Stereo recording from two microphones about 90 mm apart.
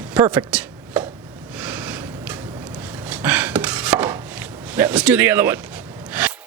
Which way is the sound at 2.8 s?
20° right (ahead or behind).